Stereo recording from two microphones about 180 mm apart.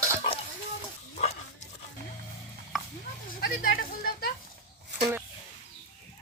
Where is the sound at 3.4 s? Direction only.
55° left (ahead or behind).